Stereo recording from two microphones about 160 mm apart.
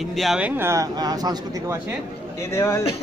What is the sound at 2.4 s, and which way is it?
Speech, 20° left (ahead or behind).